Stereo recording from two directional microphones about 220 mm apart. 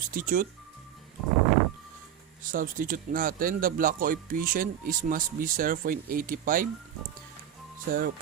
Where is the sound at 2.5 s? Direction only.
40° right (ahead or behind).